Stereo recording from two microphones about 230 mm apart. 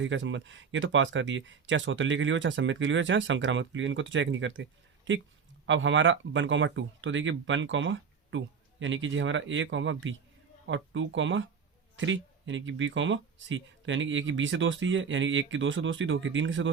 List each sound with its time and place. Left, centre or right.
0.0 s a woman's voice: right